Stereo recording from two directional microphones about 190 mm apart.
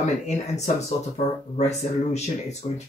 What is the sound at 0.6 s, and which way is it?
Speech, 35° left (ahead or behind).